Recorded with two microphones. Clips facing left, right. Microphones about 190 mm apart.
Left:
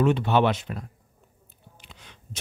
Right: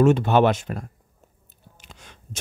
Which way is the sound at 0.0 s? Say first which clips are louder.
Right 4 dB; 45° right (ahead or behind).